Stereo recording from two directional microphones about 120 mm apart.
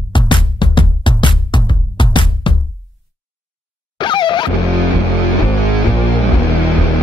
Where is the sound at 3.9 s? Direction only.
40° left (ahead or behind).